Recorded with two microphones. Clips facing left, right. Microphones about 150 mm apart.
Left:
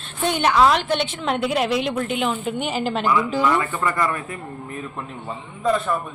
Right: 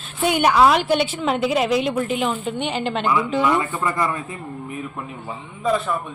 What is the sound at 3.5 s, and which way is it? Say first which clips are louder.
A man's voice: even; 20° right (ahead or behind).